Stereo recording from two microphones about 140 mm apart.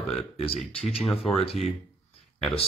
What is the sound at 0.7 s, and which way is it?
Speech, 45° left (ahead or behind).